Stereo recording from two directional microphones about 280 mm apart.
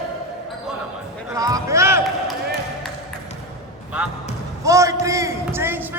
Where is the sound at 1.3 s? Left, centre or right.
Centre.